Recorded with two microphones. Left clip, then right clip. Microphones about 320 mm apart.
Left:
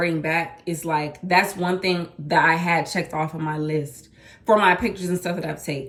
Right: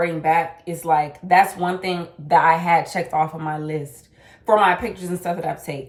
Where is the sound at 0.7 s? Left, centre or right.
Centre.